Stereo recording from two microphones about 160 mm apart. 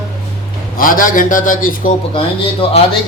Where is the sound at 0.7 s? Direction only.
60° left (ahead or behind).